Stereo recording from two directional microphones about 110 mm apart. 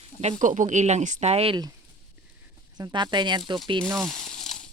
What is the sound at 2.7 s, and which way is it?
Speech, 40° right (ahead or behind).